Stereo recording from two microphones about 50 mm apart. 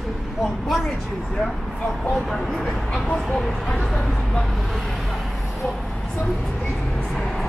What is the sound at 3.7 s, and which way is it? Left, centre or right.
Speech, centre.